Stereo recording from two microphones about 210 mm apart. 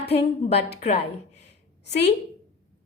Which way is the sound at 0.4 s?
30° left (ahead or behind).